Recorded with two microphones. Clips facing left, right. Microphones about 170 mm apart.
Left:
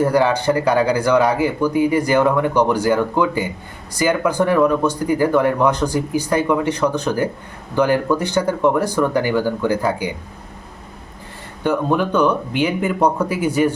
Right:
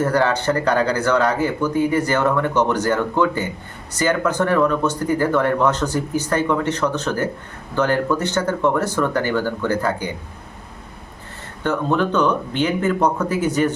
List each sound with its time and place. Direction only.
0.0 s speech: 10° left (ahead or behind)
11.6 s speech: 10° left (ahead or behind)